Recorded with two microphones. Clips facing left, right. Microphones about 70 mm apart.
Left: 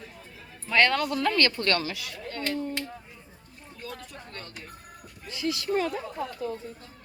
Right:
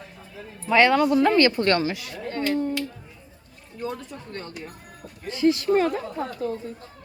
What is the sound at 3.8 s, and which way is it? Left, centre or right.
Speech, right.